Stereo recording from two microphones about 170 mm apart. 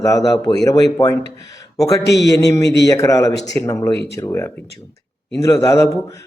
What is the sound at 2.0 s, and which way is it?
Speech, 90° left.